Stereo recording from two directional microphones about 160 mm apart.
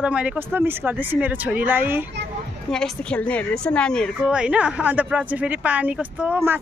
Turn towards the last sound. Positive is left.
turn(degrees=-10)  # may be behind; listen again after turning